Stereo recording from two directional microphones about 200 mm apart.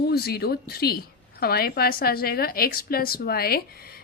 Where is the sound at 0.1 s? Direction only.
50° left (ahead or behind).